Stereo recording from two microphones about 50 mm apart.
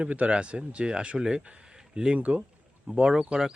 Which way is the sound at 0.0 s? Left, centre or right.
Right.